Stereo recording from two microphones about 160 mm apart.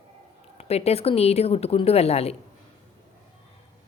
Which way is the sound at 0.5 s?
40° left (ahead or behind).